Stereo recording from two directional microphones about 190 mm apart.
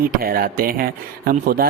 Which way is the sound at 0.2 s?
50° right (ahead or behind).